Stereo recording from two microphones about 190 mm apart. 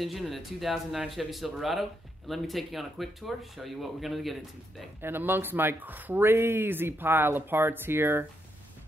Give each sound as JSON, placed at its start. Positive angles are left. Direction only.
{"t": 0.0, "sound": "speech", "side_deg": 0}
{"t": 5.0, "sound": "speech", "side_deg": -10}